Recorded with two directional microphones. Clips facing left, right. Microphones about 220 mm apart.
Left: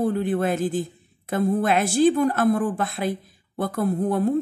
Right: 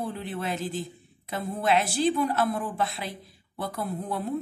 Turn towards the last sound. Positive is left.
turn(degrees=50)  # may be behind; listen again after turning